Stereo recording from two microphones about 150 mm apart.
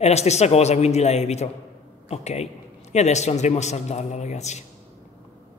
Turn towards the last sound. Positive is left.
turn(degrees=50)  # may be behind; listen again after turning